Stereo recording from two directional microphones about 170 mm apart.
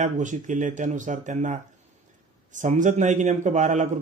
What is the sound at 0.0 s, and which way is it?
A man's voice, 45° right (ahead or behind).